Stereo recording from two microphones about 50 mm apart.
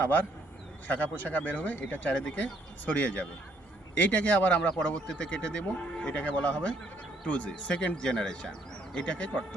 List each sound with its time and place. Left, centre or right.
0.0 s speech: left